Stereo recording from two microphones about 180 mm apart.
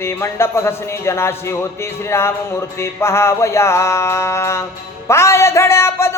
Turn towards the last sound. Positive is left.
turn(degrees=15)  # may be behind; listen again after turning